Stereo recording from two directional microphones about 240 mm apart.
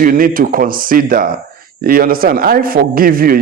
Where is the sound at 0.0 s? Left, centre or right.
Right.